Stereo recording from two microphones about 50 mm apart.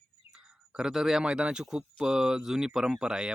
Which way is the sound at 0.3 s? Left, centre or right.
Centre.